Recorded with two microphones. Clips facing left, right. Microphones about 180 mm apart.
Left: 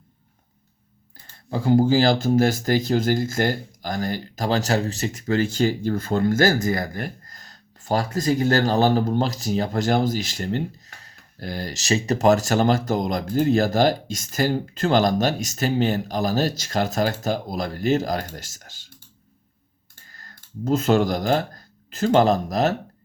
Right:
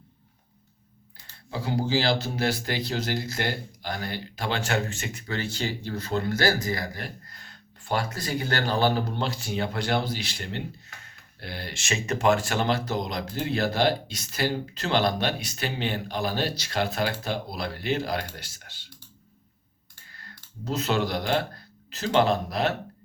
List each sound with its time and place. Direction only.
1.5 s speech: 45° left (ahead or behind)
20.1 s speech: 45° left (ahead or behind)